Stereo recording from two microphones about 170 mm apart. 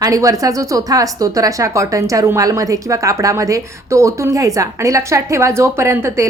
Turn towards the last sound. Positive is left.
turn(degrees=-15)  # may be behind; listen again after turning